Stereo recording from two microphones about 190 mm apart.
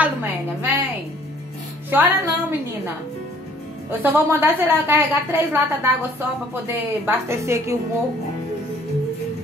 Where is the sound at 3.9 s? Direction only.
10° right (ahead or behind).